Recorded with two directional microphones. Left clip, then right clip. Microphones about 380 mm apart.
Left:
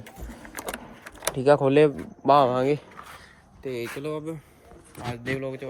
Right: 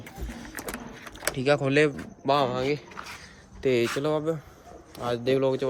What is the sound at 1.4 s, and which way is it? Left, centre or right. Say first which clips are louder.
Speech: left 4 dB; centre.